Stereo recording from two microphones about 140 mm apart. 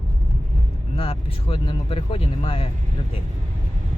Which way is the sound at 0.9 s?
40° left (ahead or behind).